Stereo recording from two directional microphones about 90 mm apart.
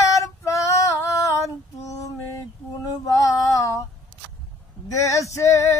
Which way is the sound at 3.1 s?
40° left (ahead or behind).